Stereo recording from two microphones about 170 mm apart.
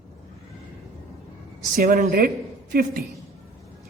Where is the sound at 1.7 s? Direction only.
55° right (ahead or behind).